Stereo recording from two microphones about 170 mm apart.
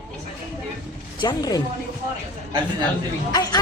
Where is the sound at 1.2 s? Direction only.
25° left (ahead or behind).